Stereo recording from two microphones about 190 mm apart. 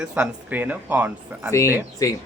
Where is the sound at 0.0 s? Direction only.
5° right (ahead or behind).